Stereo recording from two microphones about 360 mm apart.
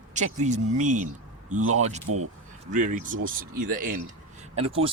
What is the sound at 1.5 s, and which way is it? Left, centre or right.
Speech, right.